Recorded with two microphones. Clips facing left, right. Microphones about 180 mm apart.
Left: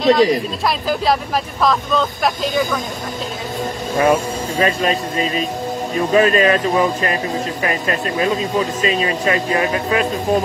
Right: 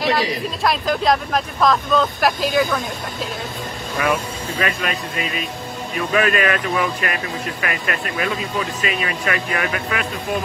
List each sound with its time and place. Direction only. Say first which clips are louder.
0.0 s speech: left 7 dB; 5° right (ahead or behind)
4.0 s speech: left 6 dB; 30° left (ahead or behind)